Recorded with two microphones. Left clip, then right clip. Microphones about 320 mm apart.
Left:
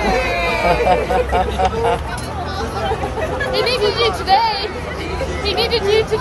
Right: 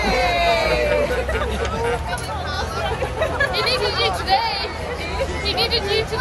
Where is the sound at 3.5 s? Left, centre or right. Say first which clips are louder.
Left 4 dB; left.